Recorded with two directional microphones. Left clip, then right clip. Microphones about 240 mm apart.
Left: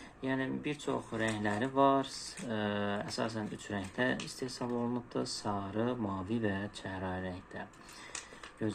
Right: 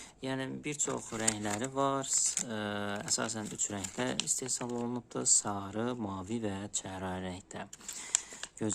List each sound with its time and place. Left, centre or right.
0.2 s speech: right